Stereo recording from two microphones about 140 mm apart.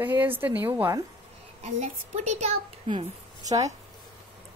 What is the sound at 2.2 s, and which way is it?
Speech, 50° right (ahead or behind).